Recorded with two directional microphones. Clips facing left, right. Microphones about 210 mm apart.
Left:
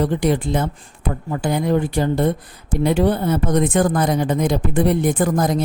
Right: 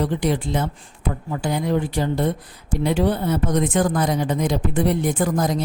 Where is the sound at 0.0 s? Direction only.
50° left (ahead or behind).